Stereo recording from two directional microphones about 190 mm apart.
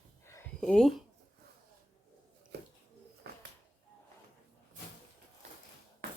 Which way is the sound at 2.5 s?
60° right (ahead or behind).